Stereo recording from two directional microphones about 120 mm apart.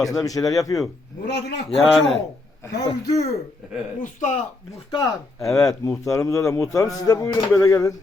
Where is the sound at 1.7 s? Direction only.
Centre (ahead or behind).